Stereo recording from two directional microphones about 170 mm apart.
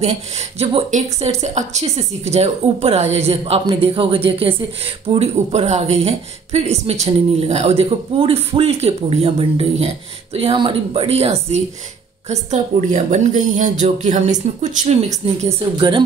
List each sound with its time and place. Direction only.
0.6 s a woman's voice: 40° right (ahead or behind)